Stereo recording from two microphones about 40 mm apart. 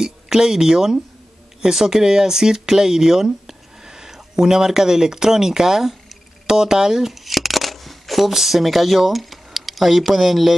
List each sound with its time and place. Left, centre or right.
0.0 s speech: centre